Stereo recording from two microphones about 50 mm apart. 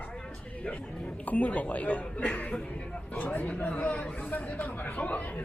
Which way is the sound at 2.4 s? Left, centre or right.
Left.